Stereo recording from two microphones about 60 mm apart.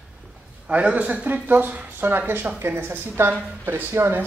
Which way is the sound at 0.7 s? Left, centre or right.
Right.